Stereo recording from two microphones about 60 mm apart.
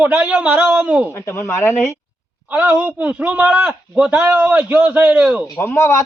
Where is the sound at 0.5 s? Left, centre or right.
Right.